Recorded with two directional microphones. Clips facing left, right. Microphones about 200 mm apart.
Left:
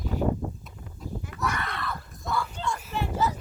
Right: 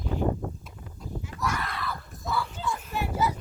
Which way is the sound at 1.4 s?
Centre (ahead or behind).